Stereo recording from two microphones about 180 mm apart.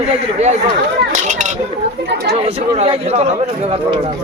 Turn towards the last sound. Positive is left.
turn(degrees=-35)  # may be behind; listen again after turning